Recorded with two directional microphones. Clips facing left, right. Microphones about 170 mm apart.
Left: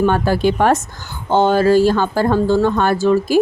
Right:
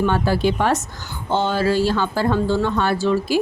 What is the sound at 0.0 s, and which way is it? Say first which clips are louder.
A woman's voice: left 4 dB; 50° left (ahead or behind).